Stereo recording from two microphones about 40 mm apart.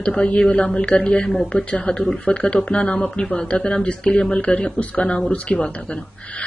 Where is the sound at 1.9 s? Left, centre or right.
Centre.